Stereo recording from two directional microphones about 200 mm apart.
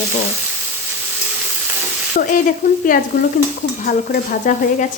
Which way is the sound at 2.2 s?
40° left (ahead or behind).